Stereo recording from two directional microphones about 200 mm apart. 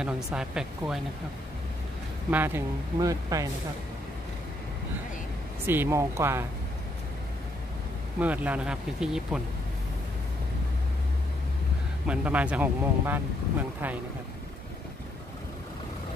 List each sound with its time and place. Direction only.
0.0 s speech: 5° right (ahead or behind)
2.3 s speech: 10° right (ahead or behind)
5.7 s speech: 10° right (ahead or behind)
8.2 s speech: 5° right (ahead or behind)
12.1 s speech: 5° right (ahead or behind)